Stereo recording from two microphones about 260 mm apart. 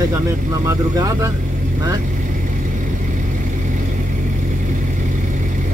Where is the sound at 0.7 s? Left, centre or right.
Centre.